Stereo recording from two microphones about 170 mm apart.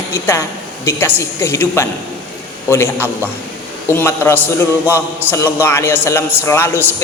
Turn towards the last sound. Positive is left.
turn(degrees=15)  # may be behind; listen again after turning